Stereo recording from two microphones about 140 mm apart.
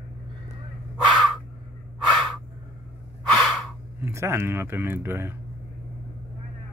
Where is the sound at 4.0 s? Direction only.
20° right (ahead or behind).